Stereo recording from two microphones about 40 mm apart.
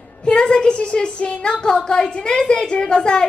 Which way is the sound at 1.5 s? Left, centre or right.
Left.